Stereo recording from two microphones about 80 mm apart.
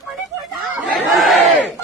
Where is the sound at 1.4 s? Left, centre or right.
Centre.